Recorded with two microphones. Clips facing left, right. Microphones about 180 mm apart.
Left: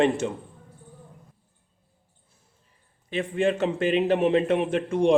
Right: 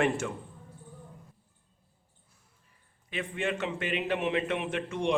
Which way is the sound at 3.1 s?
30° left (ahead or behind).